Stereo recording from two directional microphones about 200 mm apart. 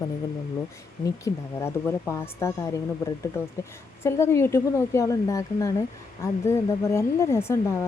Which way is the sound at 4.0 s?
10° left (ahead or behind).